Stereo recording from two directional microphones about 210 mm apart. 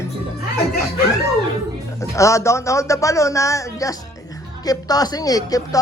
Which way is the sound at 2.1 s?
15° left (ahead or behind).